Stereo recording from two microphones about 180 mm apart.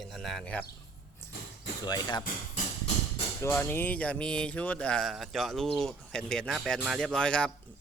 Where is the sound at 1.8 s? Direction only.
25° left (ahead or behind).